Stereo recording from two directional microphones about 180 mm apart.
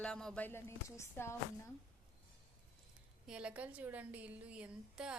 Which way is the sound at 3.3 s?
5° right (ahead or behind).